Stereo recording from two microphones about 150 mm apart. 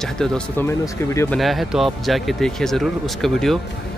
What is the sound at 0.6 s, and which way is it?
Speech, 20° left (ahead or behind).